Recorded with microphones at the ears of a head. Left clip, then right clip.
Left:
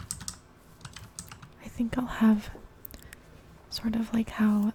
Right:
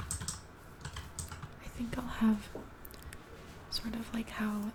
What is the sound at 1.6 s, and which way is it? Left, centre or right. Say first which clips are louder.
Speech: left 9 dB; left.